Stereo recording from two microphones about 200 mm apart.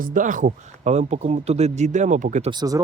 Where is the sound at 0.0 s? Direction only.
40° right (ahead or behind).